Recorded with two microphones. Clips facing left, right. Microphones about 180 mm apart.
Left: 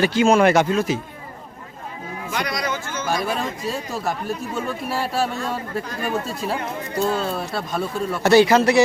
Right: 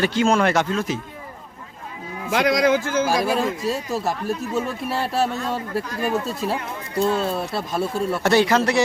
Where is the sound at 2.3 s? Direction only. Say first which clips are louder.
Right 9 dB; 90° right.